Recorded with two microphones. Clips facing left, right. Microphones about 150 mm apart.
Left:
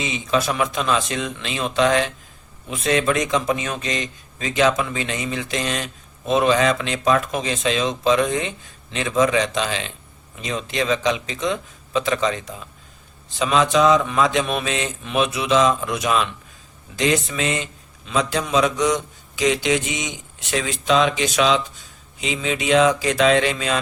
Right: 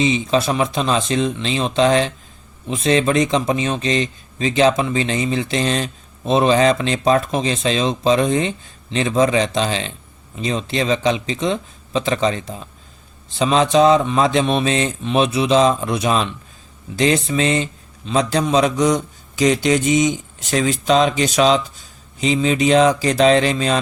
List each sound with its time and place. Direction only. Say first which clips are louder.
0.0 s speech: right 5 dB; 30° right (ahead or behind)